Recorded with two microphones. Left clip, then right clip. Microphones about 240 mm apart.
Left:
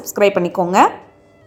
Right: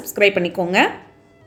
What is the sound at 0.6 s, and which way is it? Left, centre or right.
Speech, left.